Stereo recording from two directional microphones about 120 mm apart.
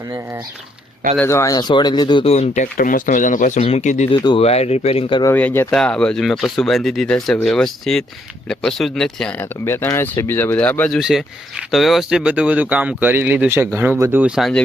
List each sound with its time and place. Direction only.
1.2 s speech: 25° left (ahead or behind)
1.5 s speech: 35° left (ahead or behind)
2.2 s speech: 60° left (ahead or behind)
4.1 s speech: 40° left (ahead or behind)
4.4 s speech: 60° left (ahead or behind)
5.3 s speech: 15° left (ahead or behind)
11.0 s speech: 5° right (ahead or behind)